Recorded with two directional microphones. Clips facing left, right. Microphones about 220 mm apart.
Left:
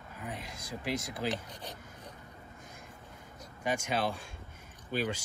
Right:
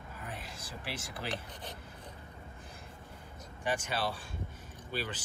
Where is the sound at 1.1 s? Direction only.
15° left (ahead or behind).